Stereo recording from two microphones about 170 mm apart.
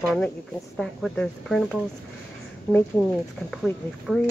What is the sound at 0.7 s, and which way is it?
Speech, centre (ahead or behind).